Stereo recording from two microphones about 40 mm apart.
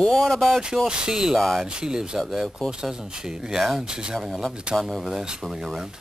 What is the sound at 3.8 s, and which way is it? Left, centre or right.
Speech, centre.